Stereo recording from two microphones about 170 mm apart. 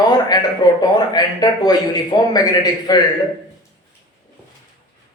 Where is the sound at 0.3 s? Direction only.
25° left (ahead or behind).